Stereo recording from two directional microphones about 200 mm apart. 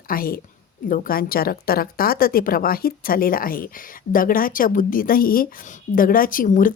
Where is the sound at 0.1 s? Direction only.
45° left (ahead or behind).